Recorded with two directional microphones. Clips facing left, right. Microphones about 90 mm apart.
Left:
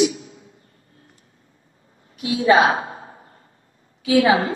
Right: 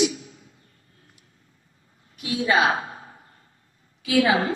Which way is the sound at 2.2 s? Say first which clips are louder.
Left 6 dB; 30° left (ahead or behind).